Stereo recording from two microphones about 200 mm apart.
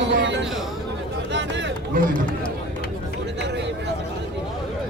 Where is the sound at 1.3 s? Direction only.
60° right (ahead or behind).